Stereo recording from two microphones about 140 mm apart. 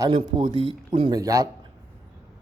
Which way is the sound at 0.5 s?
40° right (ahead or behind).